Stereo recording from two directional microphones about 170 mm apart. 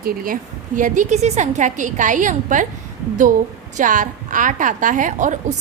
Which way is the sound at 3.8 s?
50° right (ahead or behind).